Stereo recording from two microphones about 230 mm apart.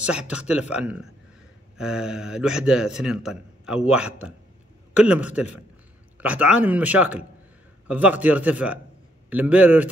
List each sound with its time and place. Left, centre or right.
0.0 s a man's voice: centre
5.0 s a man's voice: centre